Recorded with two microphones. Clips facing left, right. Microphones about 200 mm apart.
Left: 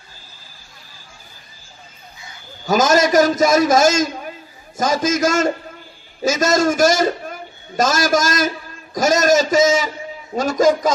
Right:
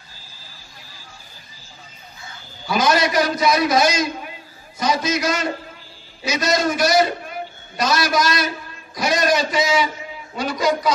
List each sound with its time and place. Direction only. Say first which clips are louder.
2.6 s a man's voice: left 4 dB; 45° left (ahead or behind)